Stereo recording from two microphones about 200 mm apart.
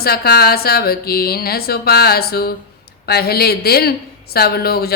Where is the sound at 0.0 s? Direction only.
50° left (ahead or behind).